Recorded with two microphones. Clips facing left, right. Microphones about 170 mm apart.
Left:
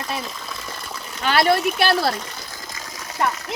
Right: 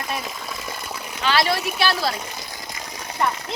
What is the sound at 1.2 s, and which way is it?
Speech, 50° left (ahead or behind).